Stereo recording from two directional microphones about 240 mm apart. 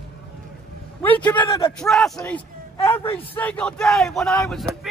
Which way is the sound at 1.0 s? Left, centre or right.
Centre.